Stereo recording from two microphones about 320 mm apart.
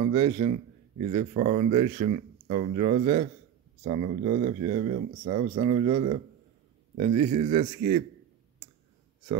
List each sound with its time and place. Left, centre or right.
0.0 s speech: centre